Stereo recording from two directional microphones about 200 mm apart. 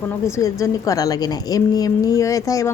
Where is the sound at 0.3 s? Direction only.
15° left (ahead or behind).